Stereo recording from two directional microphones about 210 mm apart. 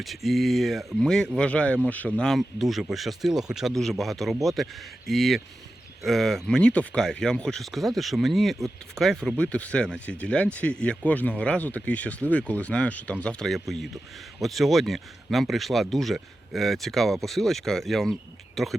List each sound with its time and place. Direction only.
0.0 s speech: centre (ahead or behind)